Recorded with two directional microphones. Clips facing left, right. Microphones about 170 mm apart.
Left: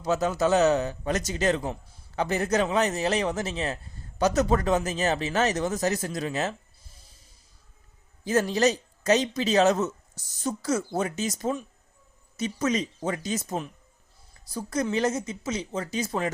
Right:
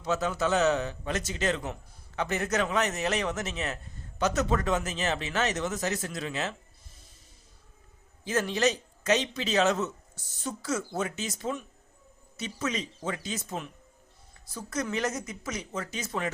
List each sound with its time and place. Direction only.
0.0 s speech: 40° left (ahead or behind)
8.2 s speech: 40° left (ahead or behind)